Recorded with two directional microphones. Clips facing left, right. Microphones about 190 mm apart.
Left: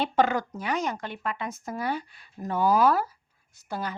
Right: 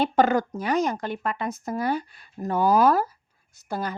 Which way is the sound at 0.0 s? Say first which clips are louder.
Right 4 dB; 45° right (ahead or behind).